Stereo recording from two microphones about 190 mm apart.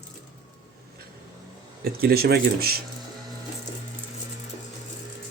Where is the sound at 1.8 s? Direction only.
55° right (ahead or behind).